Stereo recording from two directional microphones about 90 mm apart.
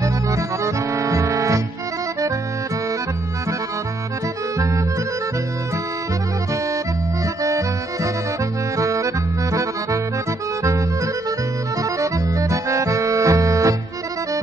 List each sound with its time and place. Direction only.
0.9 s music: 35° right (ahead or behind)
7.4 s accordion: 35° right (ahead or behind)
11.8 s accordion: 35° right (ahead or behind)